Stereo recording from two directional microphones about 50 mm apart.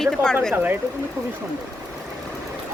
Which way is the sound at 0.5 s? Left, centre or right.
Right.